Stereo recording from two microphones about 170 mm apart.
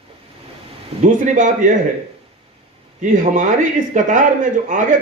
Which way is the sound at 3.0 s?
45° right (ahead or behind).